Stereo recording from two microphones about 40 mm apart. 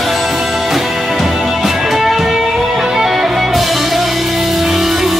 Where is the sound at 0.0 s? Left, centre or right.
Centre.